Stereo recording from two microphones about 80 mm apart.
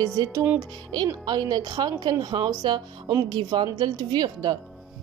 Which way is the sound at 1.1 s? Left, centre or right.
Right.